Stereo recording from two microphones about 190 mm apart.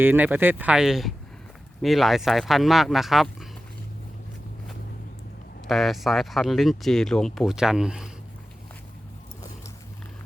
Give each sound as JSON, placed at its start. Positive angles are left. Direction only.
{"t": 0.0, "sound": "speech", "side_deg": -10}
{"t": 5.6, "sound": "speech", "side_deg": 0}